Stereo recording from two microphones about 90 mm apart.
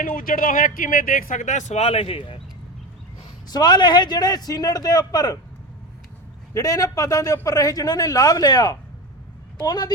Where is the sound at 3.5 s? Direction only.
55° left (ahead or behind).